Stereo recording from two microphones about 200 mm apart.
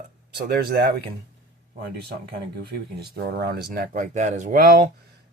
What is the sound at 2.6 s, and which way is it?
Speech, 50° right (ahead or behind).